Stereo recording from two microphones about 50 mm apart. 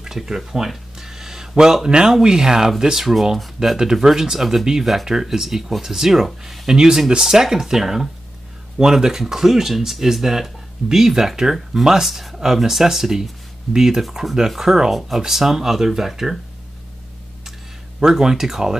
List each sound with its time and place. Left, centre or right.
0.0 s a sound: centre
2.1 s speech: centre
18.0 s speech: centre